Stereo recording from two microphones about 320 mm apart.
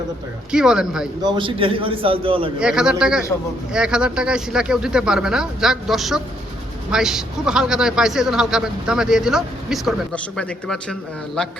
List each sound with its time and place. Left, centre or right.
0.5 s a man's voice: centre
1.2 s a man's voice: centre
2.6 s a man's voice: centre